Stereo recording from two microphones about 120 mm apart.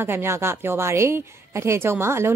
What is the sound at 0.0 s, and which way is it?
A woman's voice, 20° right (ahead or behind).